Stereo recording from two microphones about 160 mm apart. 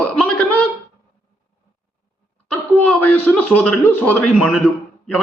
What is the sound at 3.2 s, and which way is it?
Speech, 5° left (ahead or behind).